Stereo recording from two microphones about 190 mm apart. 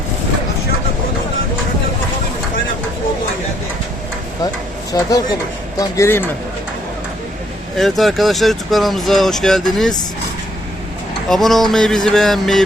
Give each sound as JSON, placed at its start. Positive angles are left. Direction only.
{"t": 4.9, "sound": "speech", "side_deg": 20}
{"t": 7.8, "sound": "speech", "side_deg": 0}
{"t": 11.3, "sound": "speech", "side_deg": 0}